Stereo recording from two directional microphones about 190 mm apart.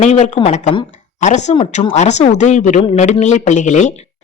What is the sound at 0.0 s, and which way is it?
A woman's voice, 35° left (ahead or behind).